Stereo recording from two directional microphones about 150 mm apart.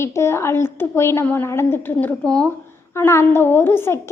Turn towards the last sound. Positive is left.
turn(degrees=15)  # may be behind; listen again after turning